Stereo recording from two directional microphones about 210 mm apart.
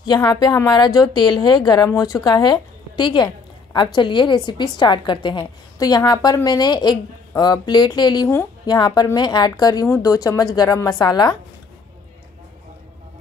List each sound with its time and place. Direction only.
0.0 s a woman's voice: 20° left (ahead or behind)